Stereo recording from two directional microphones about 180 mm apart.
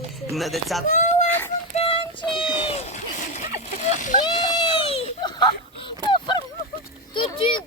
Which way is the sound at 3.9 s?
45° left (ahead or behind).